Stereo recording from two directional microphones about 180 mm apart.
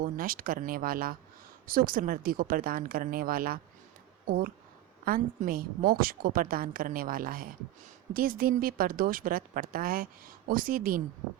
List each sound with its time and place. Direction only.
0.0 s a woman's voice: 50° right (ahead or behind)